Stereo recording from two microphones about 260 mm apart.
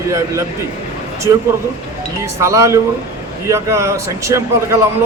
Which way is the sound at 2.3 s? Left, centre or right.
Centre.